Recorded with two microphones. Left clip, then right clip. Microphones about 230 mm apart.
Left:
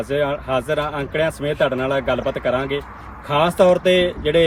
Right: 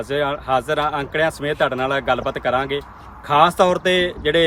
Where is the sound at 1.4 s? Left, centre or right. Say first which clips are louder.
Even; right.